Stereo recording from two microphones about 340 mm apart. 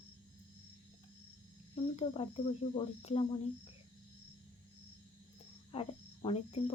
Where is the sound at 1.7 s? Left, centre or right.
Centre.